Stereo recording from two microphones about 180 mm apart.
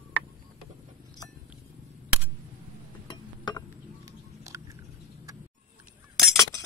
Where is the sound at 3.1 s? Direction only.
25° left (ahead or behind).